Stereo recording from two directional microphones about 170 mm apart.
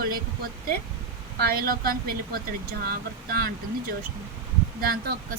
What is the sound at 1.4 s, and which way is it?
Speech, 60° right (ahead or behind).